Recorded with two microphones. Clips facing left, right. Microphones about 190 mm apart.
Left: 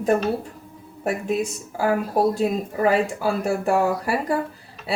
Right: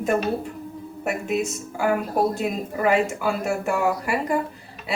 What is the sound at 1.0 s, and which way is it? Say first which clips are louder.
A woman's voice: left 1 dB; 35° left (ahead or behind).